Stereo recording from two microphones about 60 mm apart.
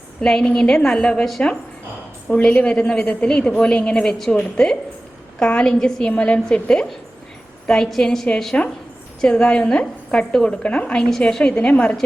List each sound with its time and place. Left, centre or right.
0.2 s a woman's voice: centre